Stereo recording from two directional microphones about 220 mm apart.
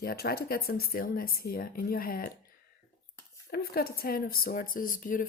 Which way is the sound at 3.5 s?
45° left (ahead or behind).